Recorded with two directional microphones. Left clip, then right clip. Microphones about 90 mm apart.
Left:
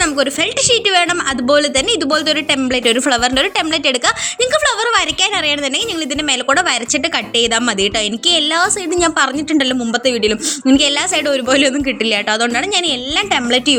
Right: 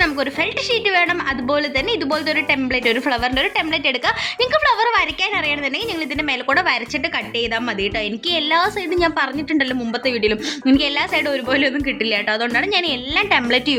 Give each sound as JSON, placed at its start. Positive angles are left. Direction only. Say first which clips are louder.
{"t": 0.7, "sound": "a woman's voice", "louder": "left 4 dB", "side_deg": 45}
{"t": 6.5, "sound": "speech", "louder": "left 3 dB", "side_deg": 40}
{"t": 7.3, "sound": "a woman's voice", "louder": "left 7 dB", "side_deg": 90}
{"t": 8.3, "sound": "a woman's voice", "louder": "left 3 dB", "side_deg": 40}
{"t": 10.1, "sound": "a woman's voice", "louder": "left 2 dB", "side_deg": 35}
{"t": 12.7, "sound": "a woman's voice", "louder": "left 3 dB", "side_deg": 30}